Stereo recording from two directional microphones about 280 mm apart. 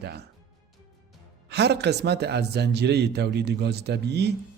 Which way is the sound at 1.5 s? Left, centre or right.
Right.